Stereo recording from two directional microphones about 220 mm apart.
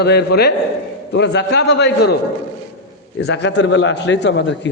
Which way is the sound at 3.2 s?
55° left (ahead or behind).